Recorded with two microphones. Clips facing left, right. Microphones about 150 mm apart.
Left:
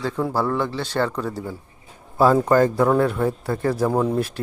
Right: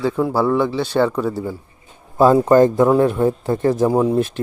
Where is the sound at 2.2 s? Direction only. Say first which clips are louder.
Right 4 dB; 20° right (ahead or behind).